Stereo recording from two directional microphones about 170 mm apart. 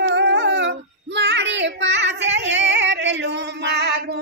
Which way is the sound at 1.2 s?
90° right.